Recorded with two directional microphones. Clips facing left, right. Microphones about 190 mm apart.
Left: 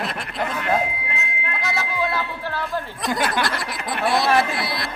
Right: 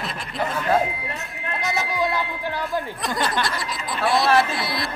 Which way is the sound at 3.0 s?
Centre (ahead or behind).